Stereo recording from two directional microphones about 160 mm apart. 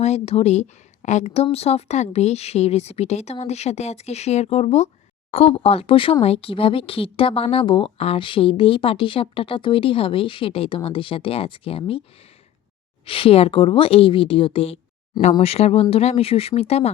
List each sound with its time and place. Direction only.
0.0 s a woman's voice: 40° left (ahead or behind)
13.1 s a woman's voice: 35° left (ahead or behind)